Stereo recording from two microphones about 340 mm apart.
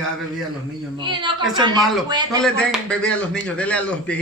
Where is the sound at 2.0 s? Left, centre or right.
Centre.